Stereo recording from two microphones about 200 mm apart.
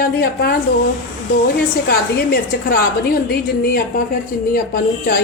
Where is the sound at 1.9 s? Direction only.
50° left (ahead or behind).